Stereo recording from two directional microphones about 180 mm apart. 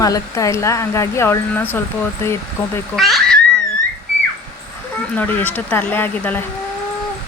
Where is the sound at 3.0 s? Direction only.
Centre (ahead or behind).